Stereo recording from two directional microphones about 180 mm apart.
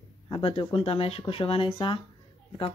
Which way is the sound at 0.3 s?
30° left (ahead or behind).